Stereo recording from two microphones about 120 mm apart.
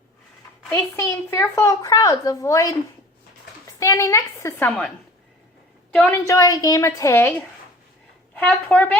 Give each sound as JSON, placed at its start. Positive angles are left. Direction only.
{"t": 0.7, "sound": "speech", "side_deg": 25}
{"t": 3.8, "sound": "speech", "side_deg": 25}
{"t": 5.9, "sound": "a woman's voice", "side_deg": 10}
{"t": 6.2, "sound": "speech", "side_deg": 30}
{"t": 8.4, "sound": "a woman's voice", "side_deg": 15}